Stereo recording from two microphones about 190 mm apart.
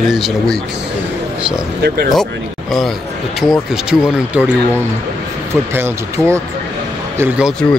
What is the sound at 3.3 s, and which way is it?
Speech, centre (ahead or behind).